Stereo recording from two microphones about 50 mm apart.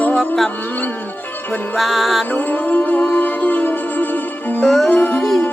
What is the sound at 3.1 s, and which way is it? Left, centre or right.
Music, left.